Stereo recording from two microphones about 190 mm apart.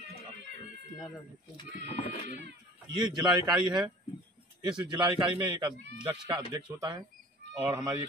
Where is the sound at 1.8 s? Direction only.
35° left (ahead or behind).